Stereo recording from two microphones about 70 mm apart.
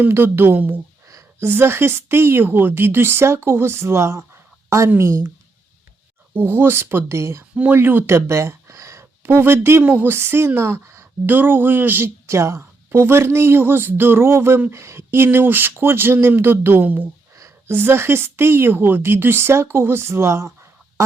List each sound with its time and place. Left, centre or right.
0.1 s speech: right
6.3 s speech: right
7.5 s speech: right
11.3 s speech: right
17.3 s a sound: right
17.7 s speech: right